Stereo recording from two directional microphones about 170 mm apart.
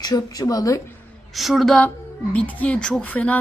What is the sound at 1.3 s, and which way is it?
A woman's voice, centre (ahead or behind).